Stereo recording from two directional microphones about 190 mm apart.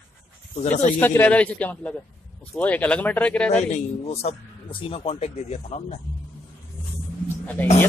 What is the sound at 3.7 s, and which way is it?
A man's voice, 35° left (ahead or behind).